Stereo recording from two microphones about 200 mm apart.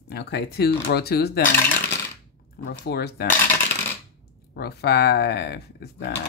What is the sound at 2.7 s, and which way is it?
Speech, 55° left (ahead or behind).